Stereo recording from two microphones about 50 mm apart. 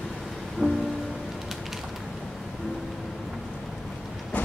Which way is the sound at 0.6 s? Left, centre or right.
Centre.